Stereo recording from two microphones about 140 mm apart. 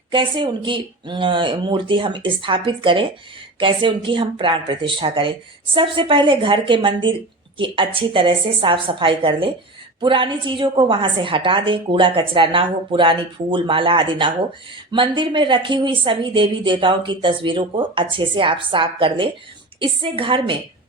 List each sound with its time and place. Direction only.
0.1 s a woman's voice: 35° right (ahead or behind)